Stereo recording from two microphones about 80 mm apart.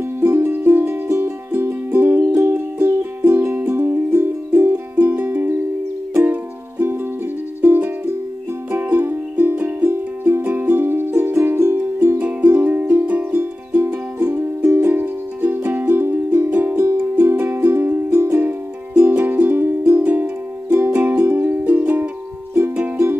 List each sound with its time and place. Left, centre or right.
0.0 s music: right
2.1 s music: right
2.5 s music: right